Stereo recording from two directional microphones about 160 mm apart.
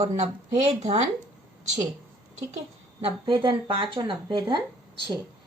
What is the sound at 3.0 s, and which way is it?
Speech, 30° right (ahead or behind).